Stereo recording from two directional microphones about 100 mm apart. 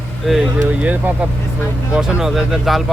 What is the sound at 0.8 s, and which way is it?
Speech, 15° right (ahead or behind).